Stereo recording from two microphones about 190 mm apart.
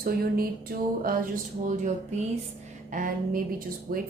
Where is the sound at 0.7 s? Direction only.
55° right (ahead or behind).